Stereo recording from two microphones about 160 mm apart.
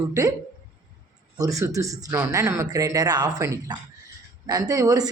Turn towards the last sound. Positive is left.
turn(degrees=-25)  # may be behind; listen again after turning